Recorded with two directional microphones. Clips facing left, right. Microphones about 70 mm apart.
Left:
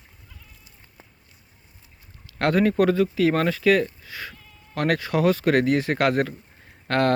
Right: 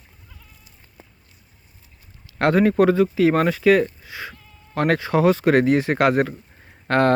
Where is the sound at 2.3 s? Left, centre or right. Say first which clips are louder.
Right 3 dB; right.